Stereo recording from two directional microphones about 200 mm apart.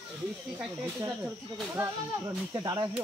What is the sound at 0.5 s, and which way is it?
Speech, 10° right (ahead or behind).